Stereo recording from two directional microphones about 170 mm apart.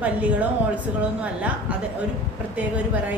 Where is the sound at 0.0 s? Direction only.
10° right (ahead or behind).